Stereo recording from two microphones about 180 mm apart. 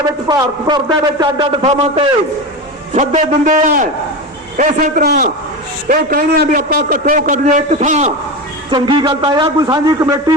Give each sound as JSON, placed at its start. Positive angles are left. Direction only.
{"t": 0.3, "sound": "a man's voice", "side_deg": -25}
{"t": 1.6, "sound": "a man's voice", "side_deg": -35}
{"t": 8.7, "sound": "a man's voice", "side_deg": -25}